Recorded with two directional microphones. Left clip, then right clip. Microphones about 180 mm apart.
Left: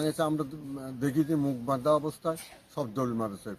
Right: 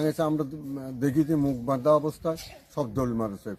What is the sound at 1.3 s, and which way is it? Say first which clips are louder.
Speech: right 3 dB; 5° right (ahead or behind).